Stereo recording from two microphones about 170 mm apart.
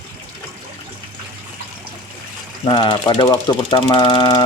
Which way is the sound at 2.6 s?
30° left (ahead or behind).